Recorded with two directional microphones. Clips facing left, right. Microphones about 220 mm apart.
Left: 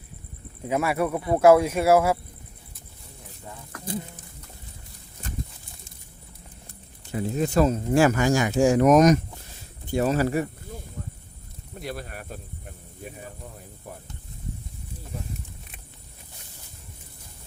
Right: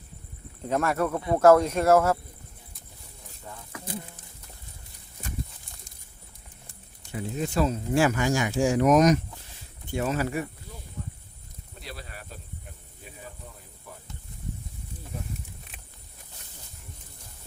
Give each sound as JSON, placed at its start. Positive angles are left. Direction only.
{"t": 0.6, "sound": "speech", "side_deg": 10}
{"t": 7.1, "sound": "speech", "side_deg": 40}
{"t": 11.8, "sound": "speech", "side_deg": 50}